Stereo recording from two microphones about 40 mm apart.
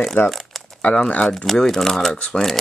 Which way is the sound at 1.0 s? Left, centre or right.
Left.